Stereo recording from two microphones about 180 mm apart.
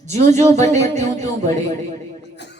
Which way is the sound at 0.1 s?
40° right (ahead or behind).